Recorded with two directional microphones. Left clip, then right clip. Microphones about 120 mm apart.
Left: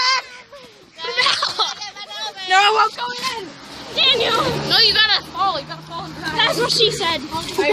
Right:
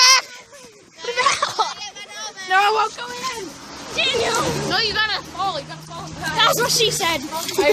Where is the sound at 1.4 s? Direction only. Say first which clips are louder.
Left 1 dB; 30° right (ahead or behind).